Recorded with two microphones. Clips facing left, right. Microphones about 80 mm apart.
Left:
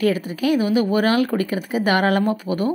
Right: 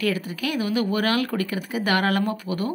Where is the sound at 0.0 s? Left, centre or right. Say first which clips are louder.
Left 6 dB; left.